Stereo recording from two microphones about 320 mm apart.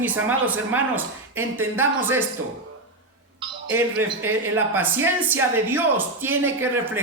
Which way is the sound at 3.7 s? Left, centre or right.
Centre.